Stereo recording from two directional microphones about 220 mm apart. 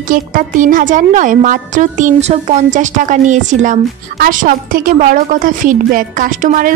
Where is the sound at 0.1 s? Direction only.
40° right (ahead or behind).